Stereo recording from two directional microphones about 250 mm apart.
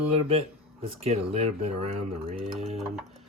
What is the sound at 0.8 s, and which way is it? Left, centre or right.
Speech, right.